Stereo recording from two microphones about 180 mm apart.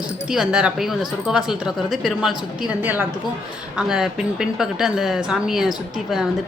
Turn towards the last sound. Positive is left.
turn(degrees=-5)  # may be behind; listen again after turning